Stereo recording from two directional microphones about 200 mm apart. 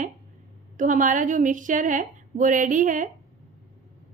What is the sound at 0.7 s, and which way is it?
A woman's voice, 40° right (ahead or behind).